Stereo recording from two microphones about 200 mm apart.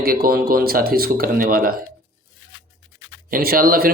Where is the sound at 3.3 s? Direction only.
45° right (ahead or behind).